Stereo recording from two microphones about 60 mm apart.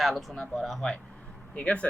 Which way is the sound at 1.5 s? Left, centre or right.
Left.